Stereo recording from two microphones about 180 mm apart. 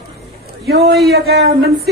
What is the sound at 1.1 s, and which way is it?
Speech, 60° right (ahead or behind).